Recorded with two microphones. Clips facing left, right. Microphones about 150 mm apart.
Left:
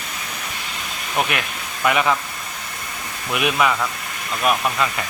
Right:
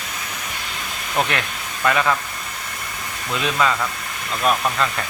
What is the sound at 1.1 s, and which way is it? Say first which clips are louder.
Speech: right 1 dB; 10° left (ahead or behind).